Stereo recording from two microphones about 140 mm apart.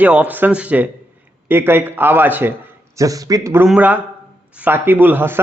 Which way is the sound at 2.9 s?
25° right (ahead or behind).